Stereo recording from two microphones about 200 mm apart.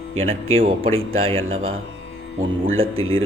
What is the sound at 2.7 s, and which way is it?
Speech, 90° right.